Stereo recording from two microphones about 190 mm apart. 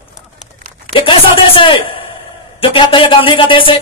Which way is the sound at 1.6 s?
30° left (ahead or behind).